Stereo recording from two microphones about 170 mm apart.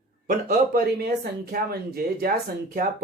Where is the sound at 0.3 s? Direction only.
60° right (ahead or behind).